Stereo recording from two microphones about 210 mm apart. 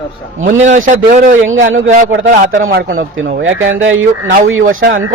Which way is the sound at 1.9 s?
40° right (ahead or behind).